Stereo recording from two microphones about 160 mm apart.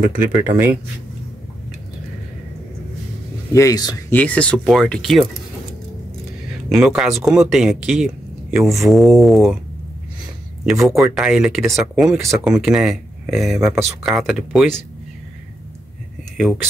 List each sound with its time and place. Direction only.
0.2 s speech: 15° right (ahead or behind)
3.5 s speech: 20° left (ahead or behind)
4.1 s speech: 10° left (ahead or behind)
6.7 s speech: 5° right (ahead or behind)
10.6 s speech: 5° right (ahead or behind)
10.9 s speech: 20° right (ahead or behind)
11.1 s speech: 5° right (ahead or behind)